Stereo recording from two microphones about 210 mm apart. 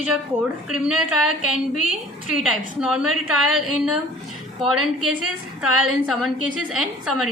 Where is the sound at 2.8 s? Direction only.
5° right (ahead or behind).